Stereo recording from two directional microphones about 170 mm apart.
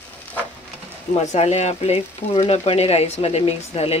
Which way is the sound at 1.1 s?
40° left (ahead or behind).